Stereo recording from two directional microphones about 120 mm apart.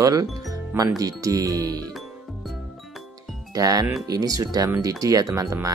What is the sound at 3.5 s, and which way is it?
Speech, 30° right (ahead or behind).